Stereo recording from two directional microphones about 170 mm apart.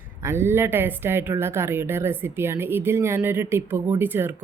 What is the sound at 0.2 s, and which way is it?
A woman's voice, 15° right (ahead or behind).